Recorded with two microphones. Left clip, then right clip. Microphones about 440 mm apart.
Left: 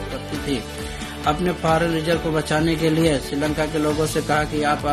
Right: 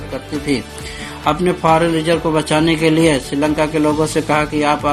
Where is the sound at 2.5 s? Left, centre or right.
Left.